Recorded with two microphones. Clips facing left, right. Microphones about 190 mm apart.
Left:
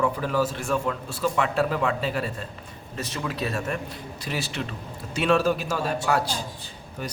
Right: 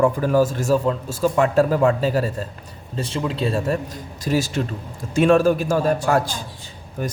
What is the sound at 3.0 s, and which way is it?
A man's voice, 30° right (ahead or behind).